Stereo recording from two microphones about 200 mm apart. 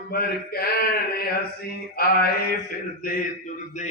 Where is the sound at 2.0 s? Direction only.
50° left (ahead or behind).